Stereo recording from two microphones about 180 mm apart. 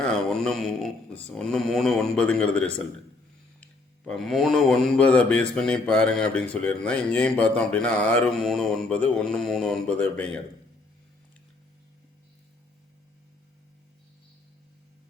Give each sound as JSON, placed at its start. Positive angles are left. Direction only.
{"t": 0.0, "sound": "speech", "side_deg": 5}